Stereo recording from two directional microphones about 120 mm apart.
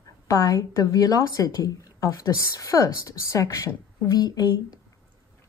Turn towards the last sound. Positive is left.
turn(degrees=35)  # may be behind; listen again after turning